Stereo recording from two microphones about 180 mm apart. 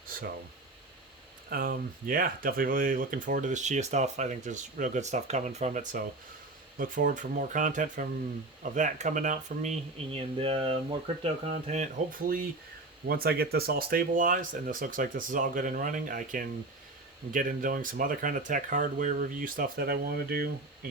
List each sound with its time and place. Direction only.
1.5 s speech: 55° right (ahead or behind)
10.1 s speech: 30° right (ahead or behind); by 20.5 s 55° right (ahead or behind)